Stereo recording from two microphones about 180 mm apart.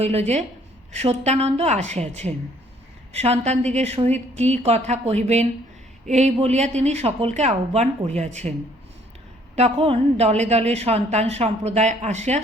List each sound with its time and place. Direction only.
0.0 s a woman's voice: 35° right (ahead or behind)
9.6 s a woman's voice: 35° right (ahead or behind)